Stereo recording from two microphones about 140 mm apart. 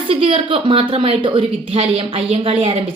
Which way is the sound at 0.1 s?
40° right (ahead or behind).